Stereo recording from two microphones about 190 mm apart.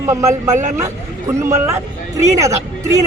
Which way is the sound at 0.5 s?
40° right (ahead or behind).